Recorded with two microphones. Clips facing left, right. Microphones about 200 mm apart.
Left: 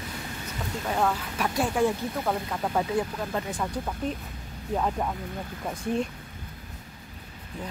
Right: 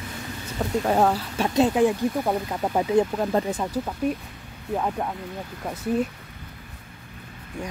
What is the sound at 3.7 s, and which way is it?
Speech, 10° right (ahead or behind).